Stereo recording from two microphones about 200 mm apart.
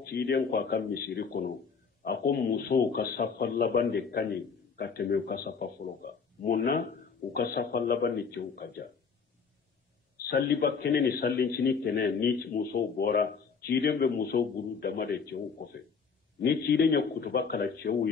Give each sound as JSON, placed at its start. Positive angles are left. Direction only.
{"t": 0.0, "sound": "a man's voice", "side_deg": 50}
{"t": 10.1, "sound": "a man's voice", "side_deg": 55}